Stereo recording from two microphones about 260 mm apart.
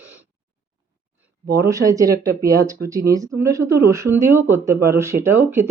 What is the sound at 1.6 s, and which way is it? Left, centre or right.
Speech, centre.